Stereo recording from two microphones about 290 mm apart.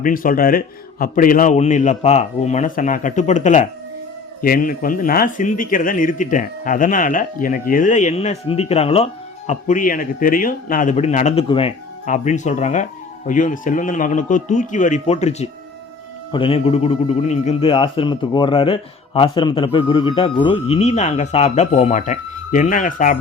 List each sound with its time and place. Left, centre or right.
0.0 s a man's voice: left